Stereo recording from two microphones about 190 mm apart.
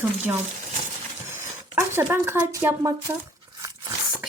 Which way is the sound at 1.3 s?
15° right (ahead or behind).